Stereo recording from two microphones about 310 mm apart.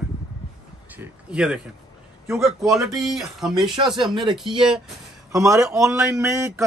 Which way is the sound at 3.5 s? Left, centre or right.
Centre.